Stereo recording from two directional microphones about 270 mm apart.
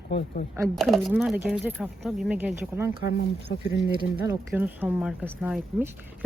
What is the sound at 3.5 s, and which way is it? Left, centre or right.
Speech, left.